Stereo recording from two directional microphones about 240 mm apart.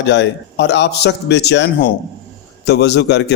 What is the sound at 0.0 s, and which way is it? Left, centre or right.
A man's voice, left.